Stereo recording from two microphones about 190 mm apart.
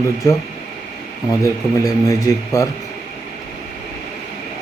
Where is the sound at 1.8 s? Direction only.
20° left (ahead or behind).